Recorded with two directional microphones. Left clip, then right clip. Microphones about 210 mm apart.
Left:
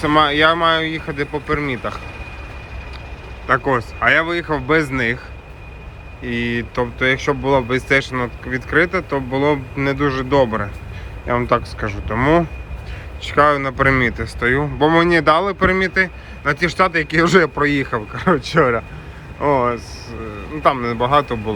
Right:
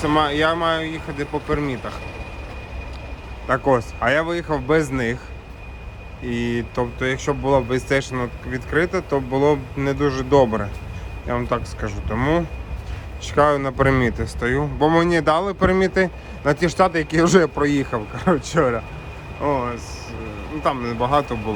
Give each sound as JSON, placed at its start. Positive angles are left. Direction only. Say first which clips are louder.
{"t": 0.0, "sound": "speech", "louder": "left 5 dB", "side_deg": -15}
{"t": 3.4, "sound": "speech", "louder": "left 2 dB", "side_deg": -15}
{"t": 6.2, "sound": "speech", "louder": "left 3 dB", "side_deg": -20}